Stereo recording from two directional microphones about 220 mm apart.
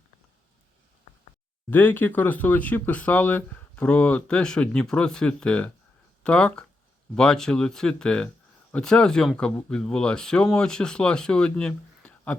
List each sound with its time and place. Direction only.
1.7 s speech: 10° left (ahead or behind)